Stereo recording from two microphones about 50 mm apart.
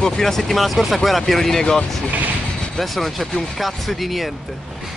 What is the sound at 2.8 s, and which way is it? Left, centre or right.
Speech, centre.